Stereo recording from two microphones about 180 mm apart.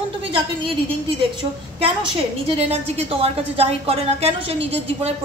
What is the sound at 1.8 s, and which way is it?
A woman's voice, 30° right (ahead or behind).